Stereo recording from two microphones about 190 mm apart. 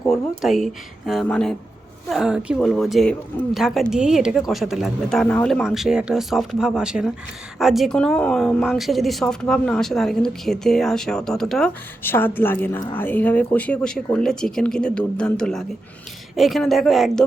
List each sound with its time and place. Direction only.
0.1 s a woman's voice: centre (ahead or behind)